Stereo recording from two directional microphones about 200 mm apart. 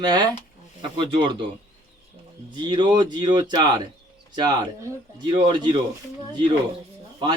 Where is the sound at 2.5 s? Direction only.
25° right (ahead or behind).